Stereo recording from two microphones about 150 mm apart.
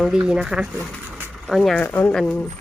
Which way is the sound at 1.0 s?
15° right (ahead or behind).